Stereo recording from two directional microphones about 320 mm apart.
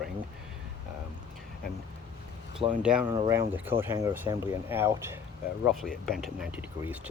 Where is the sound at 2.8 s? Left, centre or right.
Centre.